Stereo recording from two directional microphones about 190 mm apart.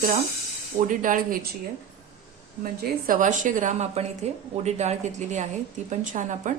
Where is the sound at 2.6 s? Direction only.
50° right (ahead or behind).